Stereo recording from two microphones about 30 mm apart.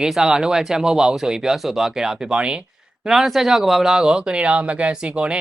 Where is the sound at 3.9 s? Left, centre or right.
Right.